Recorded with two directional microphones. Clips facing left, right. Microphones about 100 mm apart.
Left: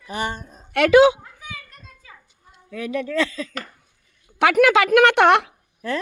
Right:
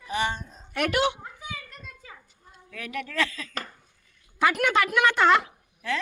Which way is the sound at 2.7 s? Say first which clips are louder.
Left 9 dB; 25° left (ahead or behind).